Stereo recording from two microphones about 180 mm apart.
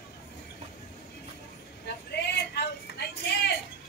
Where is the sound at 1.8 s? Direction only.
65° left (ahead or behind).